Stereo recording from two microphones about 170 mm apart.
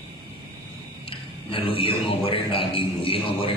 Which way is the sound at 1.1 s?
30° left (ahead or behind).